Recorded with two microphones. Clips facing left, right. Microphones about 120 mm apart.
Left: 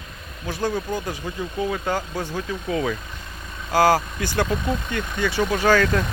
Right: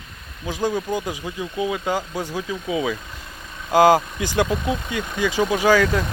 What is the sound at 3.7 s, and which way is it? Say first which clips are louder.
Speech: right 3 dB; 20° right (ahead or behind).